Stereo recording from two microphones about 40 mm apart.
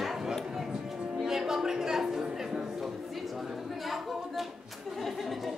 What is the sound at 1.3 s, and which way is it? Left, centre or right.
Music, centre.